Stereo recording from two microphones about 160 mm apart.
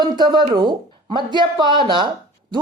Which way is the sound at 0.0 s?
25° right (ahead or behind).